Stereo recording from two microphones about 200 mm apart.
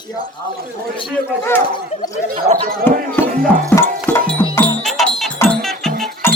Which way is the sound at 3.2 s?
10° left (ahead or behind).